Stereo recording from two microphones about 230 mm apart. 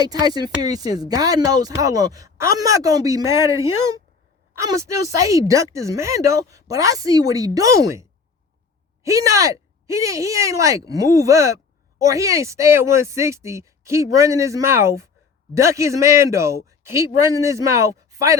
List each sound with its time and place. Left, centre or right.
0.0 s speech: centre
9.0 s speech: centre